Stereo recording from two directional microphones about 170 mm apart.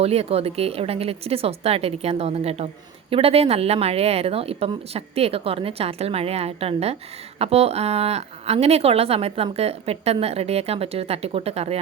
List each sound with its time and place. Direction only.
0.0 s speech: 35° right (ahead or behind)